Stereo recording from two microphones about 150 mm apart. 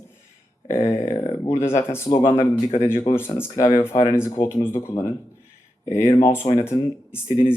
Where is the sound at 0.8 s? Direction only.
40° left (ahead or behind).